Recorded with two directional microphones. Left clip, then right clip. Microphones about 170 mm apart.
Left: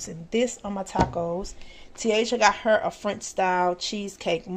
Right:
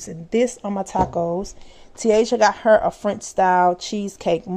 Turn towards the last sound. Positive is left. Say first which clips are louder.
# right 6 dB
turn(degrees=-35)  # may be behind; listen again after turning